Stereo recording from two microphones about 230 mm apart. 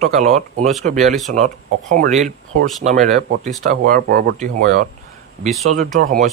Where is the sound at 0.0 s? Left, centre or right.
Right.